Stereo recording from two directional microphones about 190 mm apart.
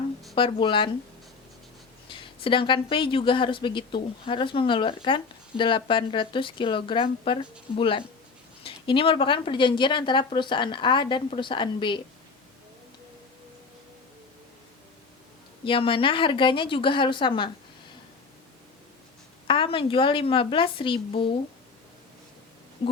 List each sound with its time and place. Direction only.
0.3 s speech: 25° left (ahead or behind)
2.0 s speech: 25° left (ahead or behind)
15.6 s speech: 30° left (ahead or behind)
19.5 s speech: 25° left (ahead or behind)
22.8 s a sound: 25° left (ahead or behind)